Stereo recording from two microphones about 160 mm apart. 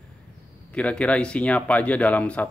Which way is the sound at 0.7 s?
10° left (ahead or behind).